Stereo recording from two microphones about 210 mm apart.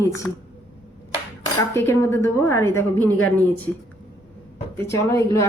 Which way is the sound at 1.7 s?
10° left (ahead or behind).